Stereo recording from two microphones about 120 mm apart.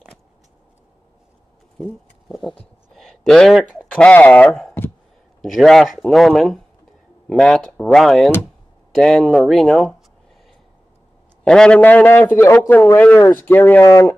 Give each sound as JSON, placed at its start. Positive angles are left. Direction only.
{"t": 1.8, "sound": "a sound", "side_deg": 0}
{"t": 3.6, "sound": "speech", "side_deg": 5}
{"t": 11.4, "sound": "a man's voice", "side_deg": 5}